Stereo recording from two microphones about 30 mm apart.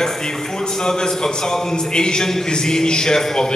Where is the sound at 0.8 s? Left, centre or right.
Left.